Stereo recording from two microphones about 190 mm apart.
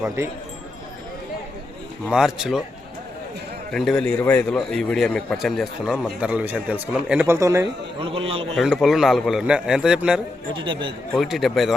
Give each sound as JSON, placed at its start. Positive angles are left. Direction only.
{"t": 0.2, "sound": "speech", "side_deg": -15}
{"t": 2.0, "sound": "a man's voice", "side_deg": -5}
{"t": 3.7, "sound": "a man's voice", "side_deg": 0}
{"t": 8.0, "sound": "a man's voice", "side_deg": -30}
{"t": 8.5, "sound": "a man's voice", "side_deg": 0}
{"t": 10.5, "sound": "a man's voice", "side_deg": -25}
{"t": 11.1, "sound": "a man's voice", "side_deg": 0}